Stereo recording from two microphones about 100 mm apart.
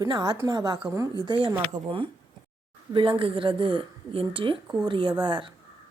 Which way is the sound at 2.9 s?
60° right (ahead or behind).